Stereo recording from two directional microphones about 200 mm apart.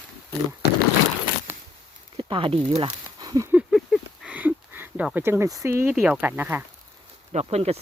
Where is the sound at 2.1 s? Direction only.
25° right (ahead or behind).